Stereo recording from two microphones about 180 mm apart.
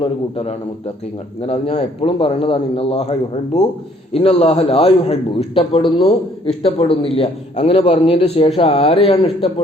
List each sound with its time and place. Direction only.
0.0 s a man's voice: 30° left (ahead or behind)